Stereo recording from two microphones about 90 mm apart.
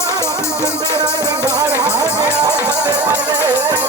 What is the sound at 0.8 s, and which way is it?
Music, 45° right (ahead or behind).